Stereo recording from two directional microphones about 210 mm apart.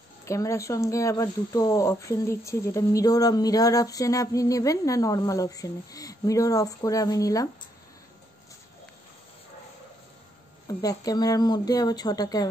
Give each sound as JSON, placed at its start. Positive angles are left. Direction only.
{"t": 0.2, "sound": "speech", "side_deg": 15}
{"t": 10.7, "sound": "speech", "side_deg": 15}